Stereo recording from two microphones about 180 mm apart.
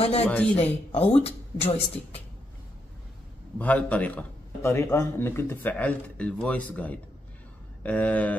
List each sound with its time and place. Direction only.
0.0 s a woman's voice: 35° left (ahead or behind)
3.5 s a man's voice: 10° left (ahead or behind)